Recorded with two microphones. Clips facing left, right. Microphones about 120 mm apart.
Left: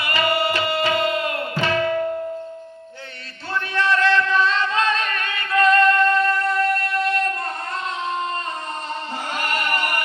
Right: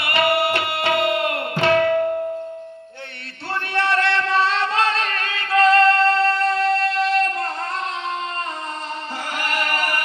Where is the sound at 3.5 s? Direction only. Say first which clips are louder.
Even; 70° right (ahead or behind).